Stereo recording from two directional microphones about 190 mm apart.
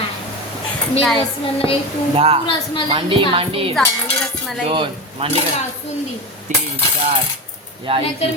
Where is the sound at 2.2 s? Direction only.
30° right (ahead or behind).